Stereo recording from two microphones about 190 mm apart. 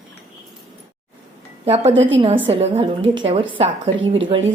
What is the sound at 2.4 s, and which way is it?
A woman's voice, 30° right (ahead or behind).